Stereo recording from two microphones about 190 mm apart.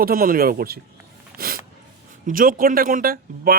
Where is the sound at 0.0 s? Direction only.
50° right (ahead or behind).